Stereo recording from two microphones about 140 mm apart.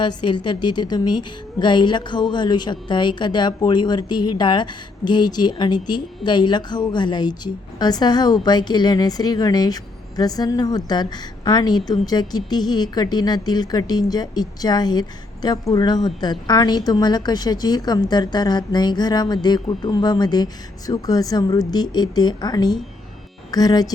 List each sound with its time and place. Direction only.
0.0 s a woman's voice: 35° left (ahead or behind)